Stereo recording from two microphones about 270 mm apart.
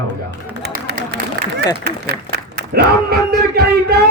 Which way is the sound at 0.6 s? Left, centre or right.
Right.